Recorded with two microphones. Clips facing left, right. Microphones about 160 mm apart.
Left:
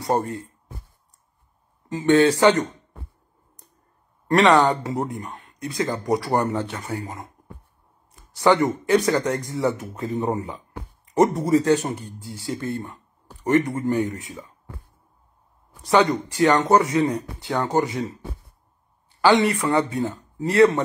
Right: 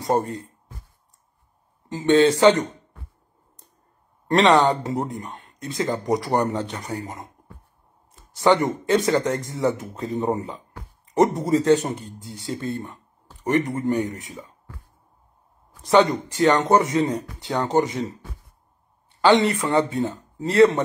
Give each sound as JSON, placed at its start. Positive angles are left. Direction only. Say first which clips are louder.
{"t": 0.0, "sound": "speech", "louder": "right 1 dB", "side_deg": -20}
{"t": 0.4, "sound": "a sound", "louder": "left 1 dB", "side_deg": 25}
{"t": 1.9, "sound": "speech", "louder": "even", "side_deg": -20}
{"t": 4.3, "sound": "speech", "louder": "even", "side_deg": -20}
{"t": 10.4, "sound": "speech", "louder": "even", "side_deg": 20}
{"t": 11.1, "sound": "speech", "louder": "left 1 dB", "side_deg": -25}
{"t": 15.8, "sound": "speech", "louder": "right 1 dB", "side_deg": -20}
{"t": 19.2, "sound": "speech", "louder": "even", "side_deg": -20}